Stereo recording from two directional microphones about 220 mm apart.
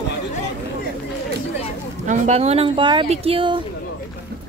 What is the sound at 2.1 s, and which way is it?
Speech, 30° right (ahead or behind).